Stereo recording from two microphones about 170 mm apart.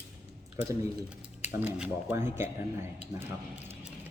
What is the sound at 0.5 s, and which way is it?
Speech, 20° right (ahead or behind).